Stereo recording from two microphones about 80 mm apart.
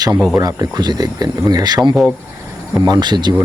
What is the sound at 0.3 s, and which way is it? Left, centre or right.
Speech, right.